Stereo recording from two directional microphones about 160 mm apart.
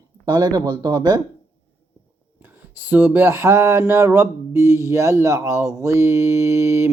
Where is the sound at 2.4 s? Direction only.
10° right (ahead or behind).